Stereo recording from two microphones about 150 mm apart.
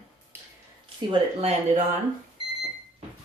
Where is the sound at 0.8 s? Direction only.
40° right (ahead or behind).